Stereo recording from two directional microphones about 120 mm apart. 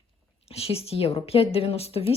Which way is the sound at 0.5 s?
55° left (ahead or behind).